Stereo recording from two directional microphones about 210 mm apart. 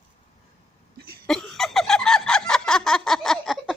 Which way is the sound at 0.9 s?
50° right (ahead or behind).